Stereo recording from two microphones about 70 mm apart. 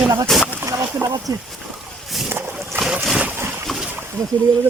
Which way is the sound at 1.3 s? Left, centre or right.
Right.